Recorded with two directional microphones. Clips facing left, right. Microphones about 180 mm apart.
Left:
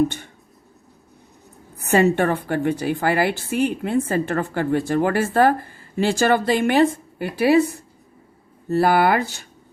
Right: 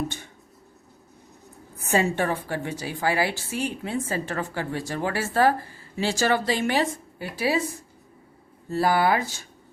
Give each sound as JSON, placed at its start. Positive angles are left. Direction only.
{"t": 1.9, "sound": "a woman's voice", "side_deg": 65}